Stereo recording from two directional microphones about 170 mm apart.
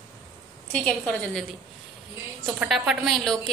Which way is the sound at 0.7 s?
5° left (ahead or behind).